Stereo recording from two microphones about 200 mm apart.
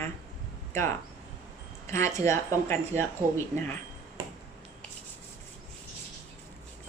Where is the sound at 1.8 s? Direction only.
15° left (ahead or behind).